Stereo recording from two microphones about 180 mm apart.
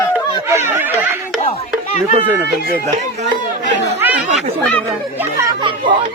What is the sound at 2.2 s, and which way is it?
Speech, 10° right (ahead or behind).